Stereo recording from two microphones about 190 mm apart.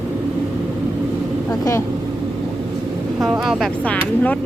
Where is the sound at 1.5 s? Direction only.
15° left (ahead or behind).